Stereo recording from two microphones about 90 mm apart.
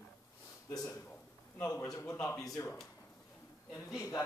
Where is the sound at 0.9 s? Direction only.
20° left (ahead or behind).